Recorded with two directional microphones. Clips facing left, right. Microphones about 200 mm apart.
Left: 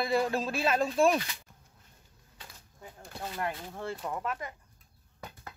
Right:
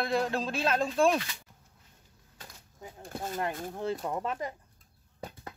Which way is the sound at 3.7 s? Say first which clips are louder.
Right 4 dB; 20° right (ahead or behind).